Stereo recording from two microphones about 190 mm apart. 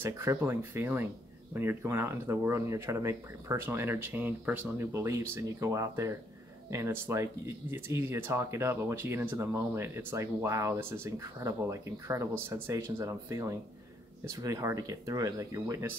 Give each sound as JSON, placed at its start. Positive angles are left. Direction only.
{"t": 0.0, "sound": "speech", "side_deg": -15}